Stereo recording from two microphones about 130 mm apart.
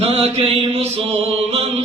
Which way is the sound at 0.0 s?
55° right (ahead or behind).